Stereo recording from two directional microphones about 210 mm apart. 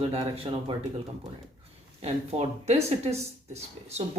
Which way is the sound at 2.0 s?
30° right (ahead or behind).